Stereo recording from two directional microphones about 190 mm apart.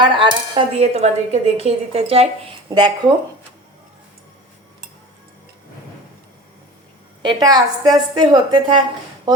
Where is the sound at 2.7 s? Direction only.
25° right (ahead or behind).